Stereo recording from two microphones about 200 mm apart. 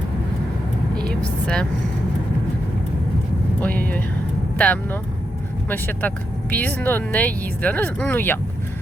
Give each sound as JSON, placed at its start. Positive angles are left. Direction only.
{"t": 0.9, "sound": "vehicle", "side_deg": 5}
{"t": 3.6, "sound": "speech", "side_deg": 5}